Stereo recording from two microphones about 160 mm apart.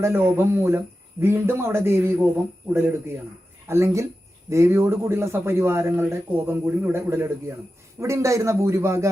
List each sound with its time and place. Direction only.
0.0 s speech: 15° right (ahead or behind)